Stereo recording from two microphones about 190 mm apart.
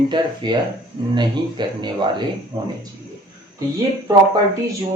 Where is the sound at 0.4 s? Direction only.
25° right (ahead or behind).